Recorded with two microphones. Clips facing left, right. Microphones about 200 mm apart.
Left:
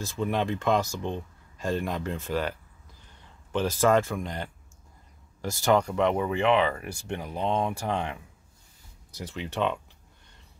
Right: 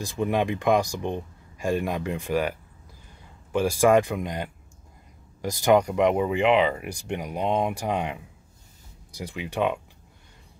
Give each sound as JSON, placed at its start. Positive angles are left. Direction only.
{"t": 0.0, "sound": "speech", "side_deg": -15}
{"t": 3.5, "sound": "speech", "side_deg": -10}